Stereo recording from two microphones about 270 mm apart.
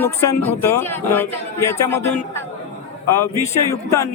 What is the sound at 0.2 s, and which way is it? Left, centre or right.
A man's voice, centre.